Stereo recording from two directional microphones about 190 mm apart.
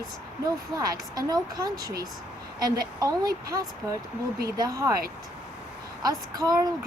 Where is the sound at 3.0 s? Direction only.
20° right (ahead or behind).